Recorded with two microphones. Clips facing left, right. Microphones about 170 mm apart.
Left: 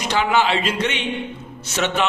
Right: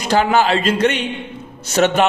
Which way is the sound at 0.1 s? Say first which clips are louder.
Right 4 dB; 40° right (ahead or behind).